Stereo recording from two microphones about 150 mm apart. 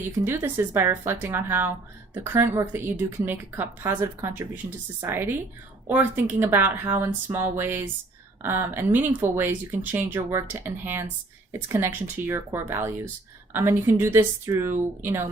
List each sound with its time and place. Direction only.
0.0 s a woman's voice: 15° right (ahead or behind)